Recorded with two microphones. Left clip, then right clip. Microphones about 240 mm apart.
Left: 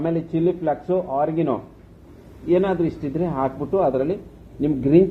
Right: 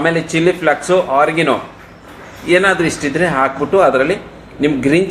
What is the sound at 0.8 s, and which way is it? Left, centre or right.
Speech, right.